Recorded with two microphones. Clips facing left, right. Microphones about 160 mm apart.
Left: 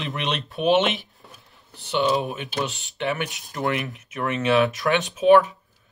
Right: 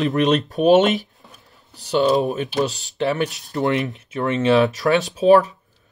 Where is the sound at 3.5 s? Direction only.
30° right (ahead or behind).